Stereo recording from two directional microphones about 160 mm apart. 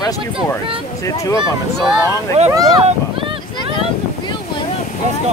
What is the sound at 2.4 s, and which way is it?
Speech, 40° right (ahead or behind).